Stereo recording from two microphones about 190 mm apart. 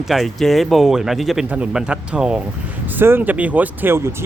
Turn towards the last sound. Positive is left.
turn(degrees=-10)  # may be behind; listen again after turning